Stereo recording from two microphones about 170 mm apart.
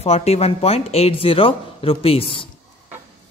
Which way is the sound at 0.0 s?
40° left (ahead or behind).